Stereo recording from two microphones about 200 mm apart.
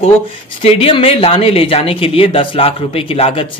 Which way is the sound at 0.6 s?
30° left (ahead or behind).